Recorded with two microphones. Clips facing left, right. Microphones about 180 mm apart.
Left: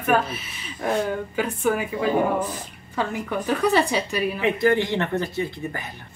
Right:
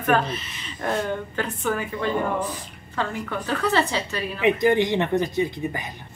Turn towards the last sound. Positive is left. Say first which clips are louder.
# right 3 dB
turn(degrees=-15)  # may be behind; listen again after turning